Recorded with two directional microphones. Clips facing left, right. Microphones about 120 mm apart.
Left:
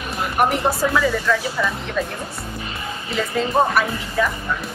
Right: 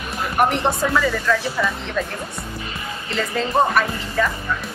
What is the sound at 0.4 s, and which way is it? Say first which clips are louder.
Speech: even; 5° left (ahead or behind).